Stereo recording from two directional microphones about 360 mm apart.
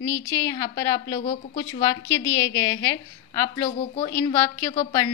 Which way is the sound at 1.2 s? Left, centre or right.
Centre.